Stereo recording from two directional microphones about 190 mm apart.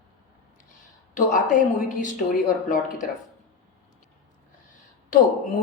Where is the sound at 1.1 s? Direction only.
45° left (ahead or behind).